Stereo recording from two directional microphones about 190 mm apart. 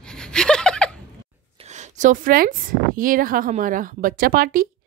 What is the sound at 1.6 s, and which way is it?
Speech, 35° right (ahead or behind).